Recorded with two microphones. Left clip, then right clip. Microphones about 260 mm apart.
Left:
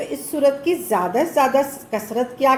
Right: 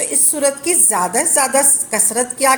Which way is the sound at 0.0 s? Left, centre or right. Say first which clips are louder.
Even; right.